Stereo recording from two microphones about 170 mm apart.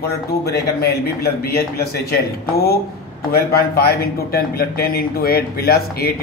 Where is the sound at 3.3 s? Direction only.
65° left (ahead or behind).